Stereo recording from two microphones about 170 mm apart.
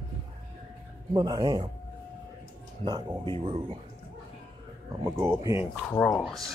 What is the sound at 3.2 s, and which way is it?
Speech, 35° right (ahead or behind).